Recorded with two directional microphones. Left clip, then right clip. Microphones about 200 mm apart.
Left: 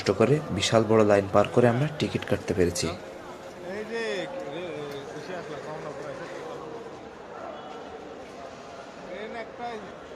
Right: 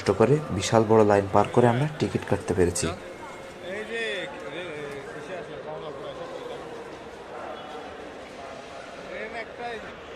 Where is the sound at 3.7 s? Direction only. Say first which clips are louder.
Right 1 dB; 50° left (ahead or behind).